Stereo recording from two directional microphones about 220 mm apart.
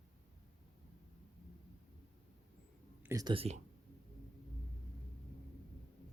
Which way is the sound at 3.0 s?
15° right (ahead or behind).